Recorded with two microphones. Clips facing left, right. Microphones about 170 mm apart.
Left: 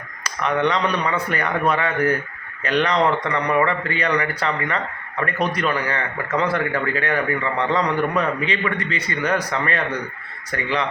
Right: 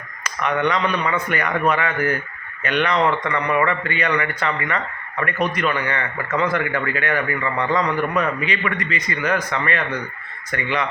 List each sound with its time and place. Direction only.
0.3 s a man's voice: 30° left (ahead or behind)